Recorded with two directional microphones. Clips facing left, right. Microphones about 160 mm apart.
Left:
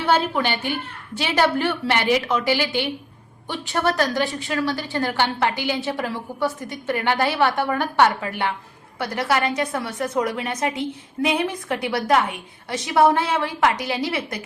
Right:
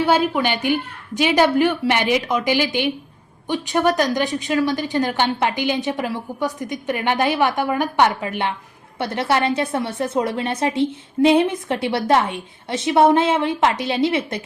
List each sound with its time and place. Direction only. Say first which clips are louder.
0.0 s a woman's voice: right 3 dB; 15° right (ahead or behind)